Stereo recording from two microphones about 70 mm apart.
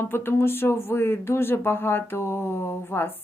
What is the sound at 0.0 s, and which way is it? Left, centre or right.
Speech, left.